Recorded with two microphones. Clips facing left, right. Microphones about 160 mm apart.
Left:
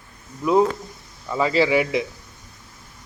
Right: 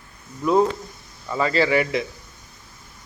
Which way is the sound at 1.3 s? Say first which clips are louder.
Left 1 dB; 10° left (ahead or behind).